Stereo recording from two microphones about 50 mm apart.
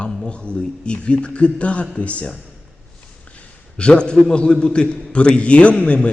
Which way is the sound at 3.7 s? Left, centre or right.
Left.